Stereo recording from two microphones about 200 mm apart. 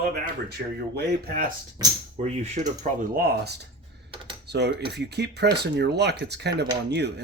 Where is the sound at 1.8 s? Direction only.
30° right (ahead or behind); by 7.2 s 55° right (ahead or behind).